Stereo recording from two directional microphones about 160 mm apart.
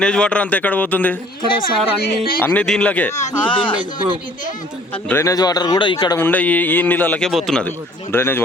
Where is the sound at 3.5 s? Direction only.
30° left (ahead or behind).